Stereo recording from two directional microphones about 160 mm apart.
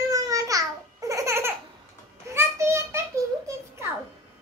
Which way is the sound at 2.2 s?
20° right (ahead or behind).